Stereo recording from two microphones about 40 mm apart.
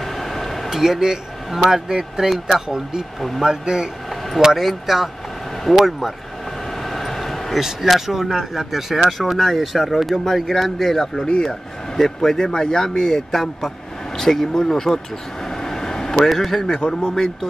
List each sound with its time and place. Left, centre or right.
0.0 s a sound: centre
0.7 s speech: centre
3.2 s speech: centre
3.4 s speech: centre
6.9 s vehicle: centre
7.5 s a man's voice: centre
15.6 s vehicle: centre
16.6 s a man's voice: centre